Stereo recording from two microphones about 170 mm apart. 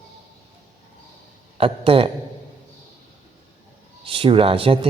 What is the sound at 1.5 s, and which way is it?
Speech, 35° right (ahead or behind).